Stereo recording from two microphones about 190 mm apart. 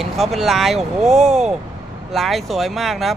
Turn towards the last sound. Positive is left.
turn(degrees=0)  # may be behind; listen again after turning